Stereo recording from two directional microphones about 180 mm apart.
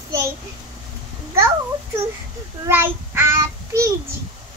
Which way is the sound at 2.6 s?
10° right (ahead or behind).